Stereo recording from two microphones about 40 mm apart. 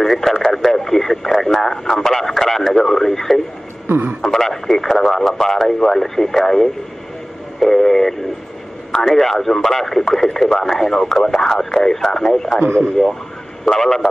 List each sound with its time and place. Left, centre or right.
0.0 s radio: centre
4.2 s speech: centre